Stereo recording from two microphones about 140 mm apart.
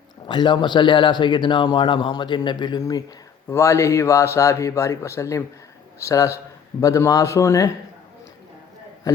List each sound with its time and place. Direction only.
0.3 s a man's voice: 35° left (ahead or behind)